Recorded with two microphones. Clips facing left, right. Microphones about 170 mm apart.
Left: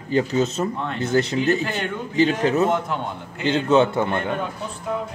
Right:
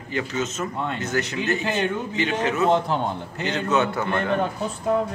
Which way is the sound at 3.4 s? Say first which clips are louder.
Left 5 dB; 30° left (ahead or behind).